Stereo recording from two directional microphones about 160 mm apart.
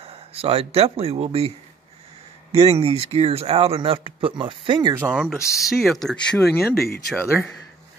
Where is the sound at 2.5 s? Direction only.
40° right (ahead or behind).